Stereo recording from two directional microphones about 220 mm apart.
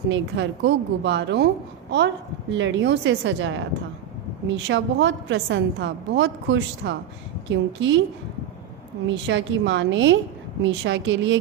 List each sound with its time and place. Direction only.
0.1 s speech: 55° right (ahead or behind)
2.5 s a woman's voice: 55° right (ahead or behind)
9.0 s a woman's voice: 55° right (ahead or behind)